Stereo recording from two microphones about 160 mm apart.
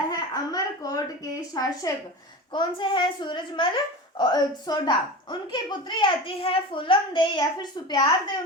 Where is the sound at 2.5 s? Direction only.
30° left (ahead or behind).